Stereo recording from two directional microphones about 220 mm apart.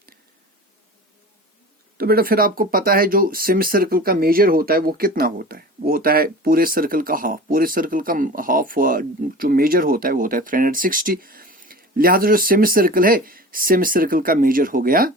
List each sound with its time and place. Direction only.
2.0 s speech: 45° right (ahead or behind)